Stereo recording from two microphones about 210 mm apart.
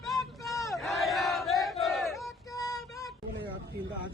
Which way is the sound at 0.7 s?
Centre (ahead or behind).